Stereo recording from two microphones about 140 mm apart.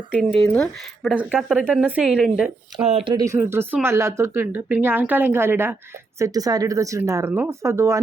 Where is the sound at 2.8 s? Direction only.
45° right (ahead or behind).